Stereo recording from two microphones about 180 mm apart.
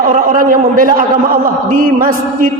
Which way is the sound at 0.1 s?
45° right (ahead or behind).